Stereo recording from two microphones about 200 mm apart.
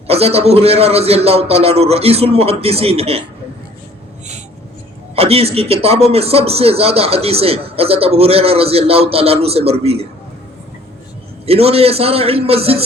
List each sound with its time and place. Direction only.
0.1 s a man's voice: 30° right (ahead or behind)
5.1 s a man's voice: 30° right (ahead or behind)
11.4 s a man's voice: 30° right (ahead or behind)